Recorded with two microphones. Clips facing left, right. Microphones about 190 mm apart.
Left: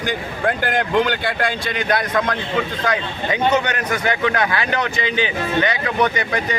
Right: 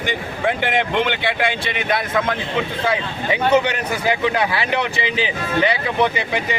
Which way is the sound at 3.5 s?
10° right (ahead or behind).